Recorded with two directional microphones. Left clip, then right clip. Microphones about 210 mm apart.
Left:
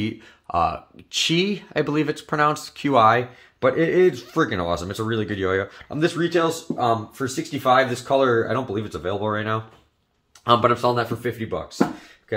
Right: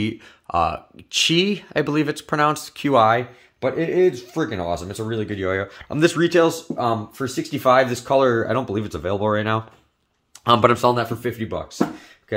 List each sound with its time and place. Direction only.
0.0 s speech: 20° right (ahead or behind)
5.9 s speech: 45° right (ahead or behind)